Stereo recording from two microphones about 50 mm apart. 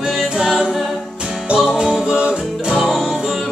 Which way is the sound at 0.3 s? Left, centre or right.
Centre.